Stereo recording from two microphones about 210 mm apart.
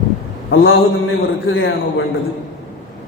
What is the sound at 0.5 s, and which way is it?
A man's voice, 70° left (ahead or behind).